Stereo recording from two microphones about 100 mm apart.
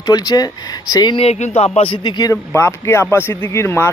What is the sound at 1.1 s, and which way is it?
Speech, 85° left.